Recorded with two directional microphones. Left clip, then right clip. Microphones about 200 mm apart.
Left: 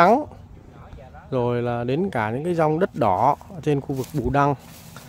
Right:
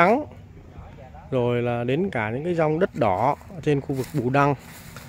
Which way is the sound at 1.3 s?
Centre (ahead or behind).